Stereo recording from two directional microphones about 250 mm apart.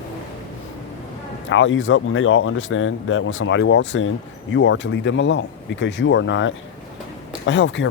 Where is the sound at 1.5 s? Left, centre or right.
Left.